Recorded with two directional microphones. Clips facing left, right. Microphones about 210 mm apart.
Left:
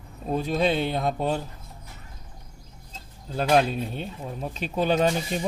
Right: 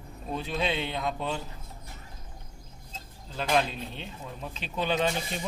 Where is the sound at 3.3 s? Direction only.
45° left (ahead or behind).